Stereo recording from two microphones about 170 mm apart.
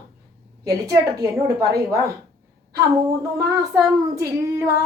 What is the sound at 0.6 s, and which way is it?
A woman's voice, 20° right (ahead or behind).